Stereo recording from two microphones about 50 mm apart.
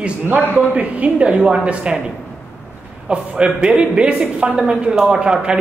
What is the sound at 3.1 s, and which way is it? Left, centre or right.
Speech, right.